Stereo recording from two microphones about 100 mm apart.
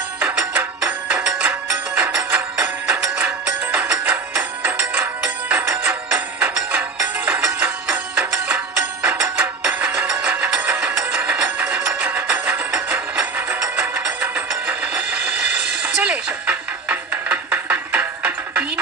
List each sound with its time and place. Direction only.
1.1 s music: 15° right (ahead or behind)
3.7 s music: 15° right (ahead or behind)